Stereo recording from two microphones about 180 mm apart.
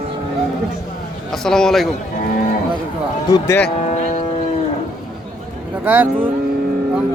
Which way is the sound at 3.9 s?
40° left (ahead or behind).